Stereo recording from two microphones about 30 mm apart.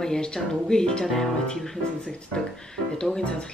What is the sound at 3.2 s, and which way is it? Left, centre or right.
Speech, left.